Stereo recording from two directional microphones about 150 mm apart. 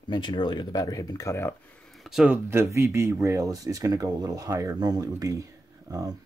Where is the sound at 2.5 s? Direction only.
15° right (ahead or behind).